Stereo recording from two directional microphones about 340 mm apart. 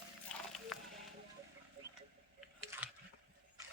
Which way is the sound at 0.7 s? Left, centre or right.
Centre.